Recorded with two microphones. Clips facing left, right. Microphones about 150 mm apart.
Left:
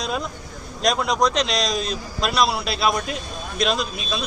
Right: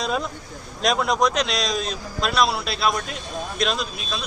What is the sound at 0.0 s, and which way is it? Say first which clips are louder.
A man's voice: right 1 dB; centre (ahead or behind).